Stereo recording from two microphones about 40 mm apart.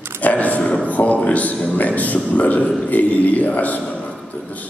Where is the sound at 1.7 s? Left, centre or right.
Left.